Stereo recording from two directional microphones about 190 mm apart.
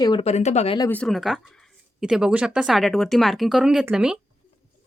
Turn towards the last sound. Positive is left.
turn(degrees=-5)  # may be behind; listen again after turning